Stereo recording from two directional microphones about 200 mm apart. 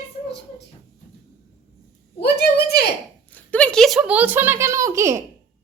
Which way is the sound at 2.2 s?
55° left (ahead or behind).